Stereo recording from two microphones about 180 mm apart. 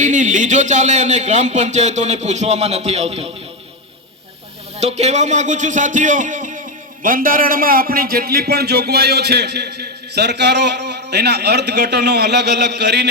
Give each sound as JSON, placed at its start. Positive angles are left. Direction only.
{"t": 0.0, "sound": "speech", "side_deg": -45}
{"t": 4.8, "sound": "a man's voice", "side_deg": -35}